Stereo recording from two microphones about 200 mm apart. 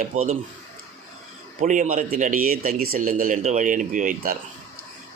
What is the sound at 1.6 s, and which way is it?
A man's voice, 40° right (ahead or behind).